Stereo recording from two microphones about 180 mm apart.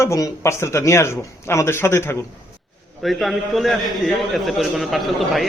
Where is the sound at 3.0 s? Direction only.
Centre (ahead or behind).